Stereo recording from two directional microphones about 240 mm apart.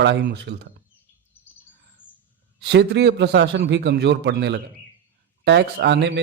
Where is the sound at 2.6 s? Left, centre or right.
Right.